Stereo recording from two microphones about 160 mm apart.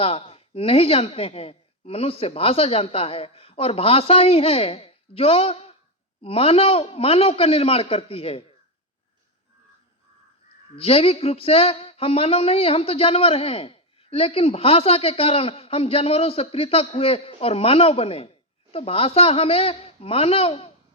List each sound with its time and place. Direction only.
0.0 s speech: 35° left (ahead or behind)
10.8 s speech: 40° left (ahead or behind)